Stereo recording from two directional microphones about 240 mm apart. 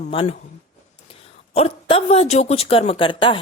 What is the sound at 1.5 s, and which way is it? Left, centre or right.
A woman's voice, left.